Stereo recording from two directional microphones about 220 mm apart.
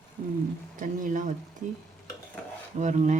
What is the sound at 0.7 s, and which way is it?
Speech, 35° right (ahead or behind).